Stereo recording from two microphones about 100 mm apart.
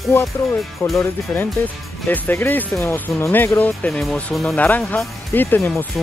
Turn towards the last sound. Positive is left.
turn(degrees=20)  # may be behind; listen again after turning